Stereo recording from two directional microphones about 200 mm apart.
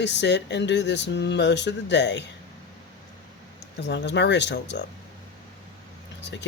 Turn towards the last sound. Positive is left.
turn(degrees=60)  # may be behind; listen again after turning